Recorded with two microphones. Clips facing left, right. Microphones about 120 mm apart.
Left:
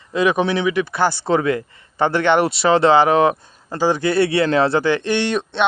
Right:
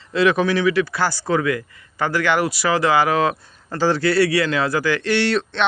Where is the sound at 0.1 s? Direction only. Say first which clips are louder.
Even; 15° left (ahead or behind).